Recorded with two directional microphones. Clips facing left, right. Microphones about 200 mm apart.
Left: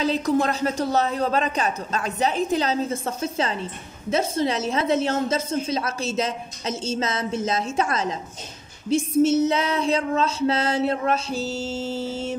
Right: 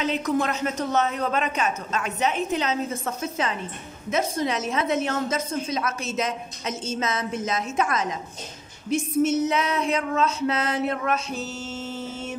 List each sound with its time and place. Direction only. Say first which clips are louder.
0.0 s a woman's voice: left 3 dB; 35° left (ahead or behind)